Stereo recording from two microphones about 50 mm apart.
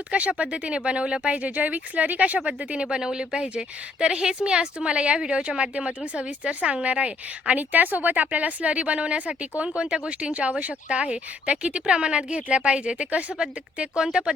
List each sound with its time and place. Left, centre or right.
0.1 s a woman's voice: right